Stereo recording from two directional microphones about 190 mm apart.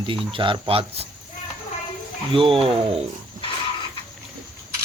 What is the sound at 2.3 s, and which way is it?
Speech, 30° right (ahead or behind).